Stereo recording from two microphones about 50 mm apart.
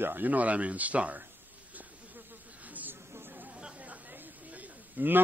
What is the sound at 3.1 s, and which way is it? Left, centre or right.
Chatter, right.